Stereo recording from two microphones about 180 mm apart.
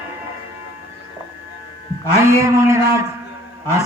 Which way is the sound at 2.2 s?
15° right (ahead or behind).